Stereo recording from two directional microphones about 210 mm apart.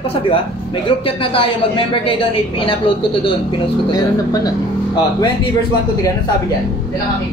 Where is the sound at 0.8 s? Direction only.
25° left (ahead or behind).